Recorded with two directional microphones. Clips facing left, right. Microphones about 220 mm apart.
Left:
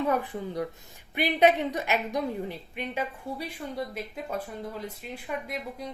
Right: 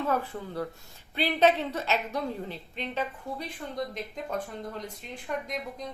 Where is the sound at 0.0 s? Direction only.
15° left (ahead or behind).